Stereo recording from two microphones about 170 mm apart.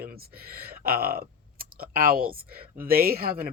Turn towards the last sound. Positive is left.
turn(degrees=-60)  # may be behind; listen again after turning